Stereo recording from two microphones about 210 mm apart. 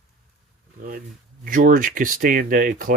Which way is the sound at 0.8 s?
45° right (ahead or behind).